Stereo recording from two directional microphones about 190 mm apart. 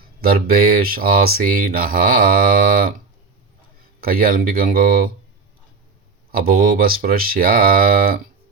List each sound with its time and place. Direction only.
0.0 s speech: 50° right (ahead or behind)
4.0 s speech: 50° right (ahead or behind)
6.3 s speech: 50° right (ahead or behind)